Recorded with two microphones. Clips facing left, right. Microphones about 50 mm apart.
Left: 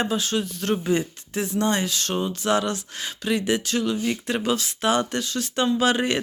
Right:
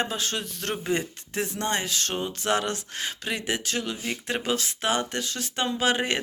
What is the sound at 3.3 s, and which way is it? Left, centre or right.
Speech, right.